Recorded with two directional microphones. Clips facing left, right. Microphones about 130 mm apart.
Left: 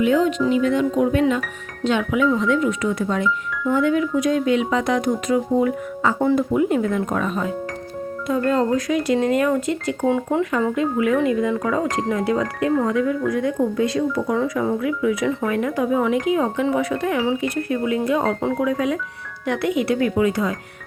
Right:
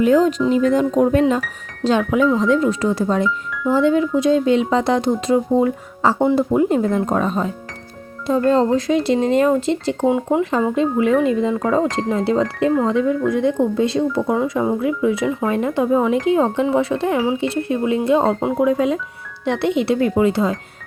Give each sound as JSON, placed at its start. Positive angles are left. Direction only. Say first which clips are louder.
{"t": 0.0, "sound": "speech", "louder": "right 3 dB", "side_deg": -40}
{"t": 10.1, "sound": "speech", "louder": "right 2 dB", "side_deg": -15}